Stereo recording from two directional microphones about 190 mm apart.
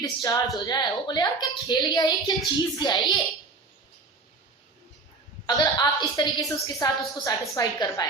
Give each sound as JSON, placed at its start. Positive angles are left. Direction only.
{"t": 0.0, "sound": "a woman's voice", "side_deg": 20}
{"t": 5.5, "sound": "a woman's voice", "side_deg": 20}